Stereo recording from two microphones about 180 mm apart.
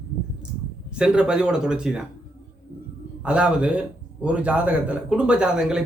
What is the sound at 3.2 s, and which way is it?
A man's voice, 5° right (ahead or behind).